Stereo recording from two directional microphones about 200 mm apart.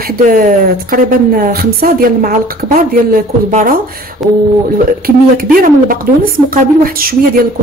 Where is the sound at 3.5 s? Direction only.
45° right (ahead or behind).